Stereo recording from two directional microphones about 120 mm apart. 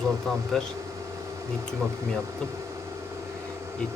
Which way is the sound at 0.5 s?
Centre (ahead or behind).